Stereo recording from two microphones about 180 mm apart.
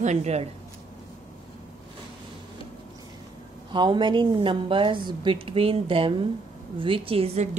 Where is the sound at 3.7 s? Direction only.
25° right (ahead or behind).